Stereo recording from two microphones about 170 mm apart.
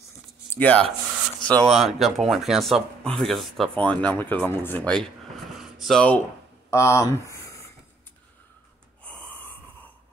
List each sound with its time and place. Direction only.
0.5 s speech: 10° left (ahead or behind)
5.6 s a sound: centre (ahead or behind)
6.7 s speech: 15° left (ahead or behind)
9.0 s wheeze: 10° left (ahead or behind)